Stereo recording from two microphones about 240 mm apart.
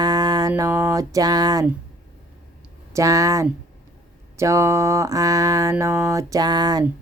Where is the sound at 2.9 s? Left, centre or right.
Centre.